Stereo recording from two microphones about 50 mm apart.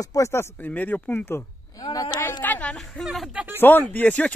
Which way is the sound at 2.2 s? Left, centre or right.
Left.